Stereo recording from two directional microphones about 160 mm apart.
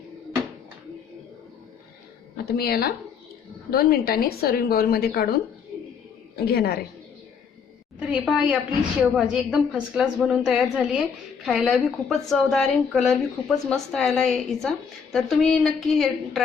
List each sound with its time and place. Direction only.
2.5 s a woman's voice: 75° left (ahead or behind)
6.3 s a woman's voice: 75° left (ahead or behind)
7.9 s a woman's voice: 5° right (ahead or behind)